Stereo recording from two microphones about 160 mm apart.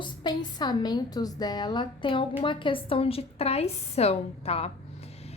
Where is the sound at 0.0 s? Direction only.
30° left (ahead or behind).